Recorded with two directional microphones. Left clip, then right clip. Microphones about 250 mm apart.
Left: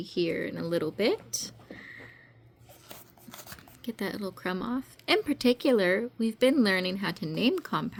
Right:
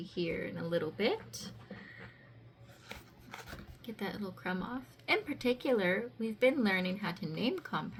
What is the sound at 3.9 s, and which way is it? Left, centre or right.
A woman's voice, left.